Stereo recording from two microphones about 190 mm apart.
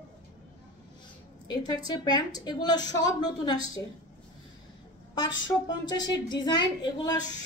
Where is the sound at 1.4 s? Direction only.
20° left (ahead or behind).